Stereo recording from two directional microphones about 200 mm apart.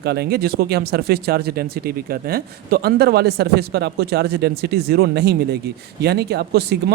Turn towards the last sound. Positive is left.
turn(degrees=-55)  # may be behind; listen again after turning